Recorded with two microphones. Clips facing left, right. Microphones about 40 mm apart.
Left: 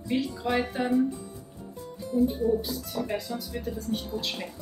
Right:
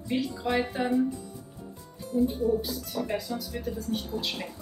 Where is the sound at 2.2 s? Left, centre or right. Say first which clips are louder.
Left 1 dB; centre.